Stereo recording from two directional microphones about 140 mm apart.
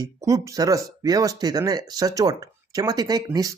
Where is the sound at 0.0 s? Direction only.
25° right (ahead or behind).